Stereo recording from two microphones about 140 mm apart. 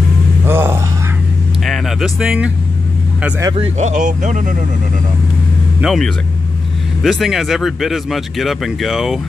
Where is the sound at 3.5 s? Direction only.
50° right (ahead or behind).